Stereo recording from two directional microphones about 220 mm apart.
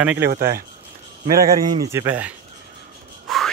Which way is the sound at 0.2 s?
45° right (ahead or behind).